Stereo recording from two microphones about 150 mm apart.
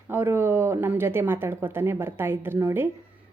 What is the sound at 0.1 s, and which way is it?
A woman's voice, 15° right (ahead or behind).